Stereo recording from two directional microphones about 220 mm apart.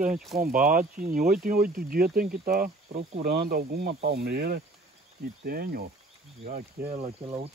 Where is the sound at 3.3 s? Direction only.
45° right (ahead or behind).